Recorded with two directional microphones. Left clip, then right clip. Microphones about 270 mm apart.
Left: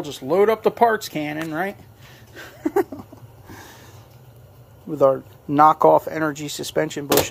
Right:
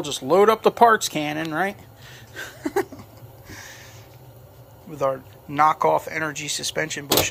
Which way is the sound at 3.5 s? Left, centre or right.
Left.